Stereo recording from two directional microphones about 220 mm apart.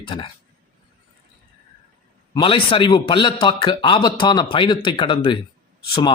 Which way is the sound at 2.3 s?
25° left (ahead or behind).